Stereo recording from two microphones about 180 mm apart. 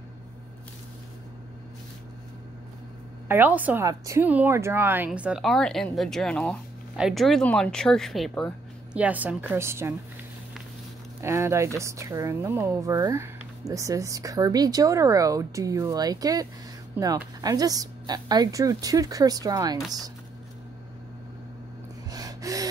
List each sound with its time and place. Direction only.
3.3 s speech: 10° right (ahead or behind)
11.1 s a woman's voice: 15° right (ahead or behind)
22.1 s gasp: 20° right (ahead or behind)